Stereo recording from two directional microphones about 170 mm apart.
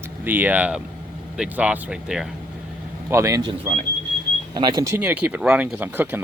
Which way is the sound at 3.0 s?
15° right (ahead or behind).